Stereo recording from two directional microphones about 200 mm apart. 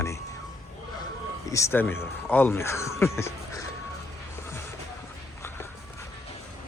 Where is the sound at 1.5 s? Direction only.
10° left (ahead or behind).